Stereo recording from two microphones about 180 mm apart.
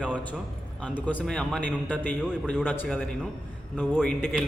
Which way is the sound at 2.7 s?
10° left (ahead or behind).